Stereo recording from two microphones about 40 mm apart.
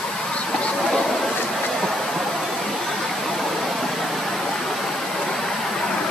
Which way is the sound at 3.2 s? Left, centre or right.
Centre.